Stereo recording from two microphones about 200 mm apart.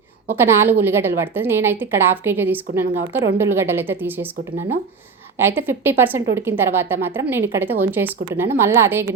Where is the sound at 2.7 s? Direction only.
50° right (ahead or behind).